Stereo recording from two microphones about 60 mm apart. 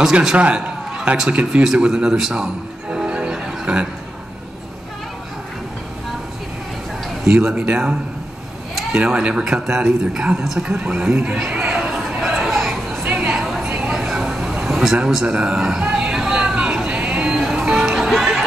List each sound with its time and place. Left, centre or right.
0.0 s a man's voice: centre
0.6 s a sound: centre
1.3 s speech: centre
7.5 s a man's voice: right
8.9 s a man's voice: centre
10.8 s a man's voice: centre
12.2 s chatter: centre
13.0 s a sound: centre